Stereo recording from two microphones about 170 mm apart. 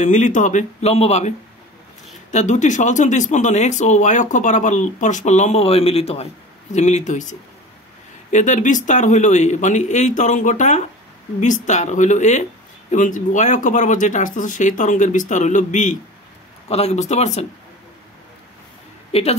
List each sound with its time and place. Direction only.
0.0 s speech: 45° left (ahead or behind)
2.3 s speech: 45° left (ahead or behind)
19.1 s speech: 35° left (ahead or behind)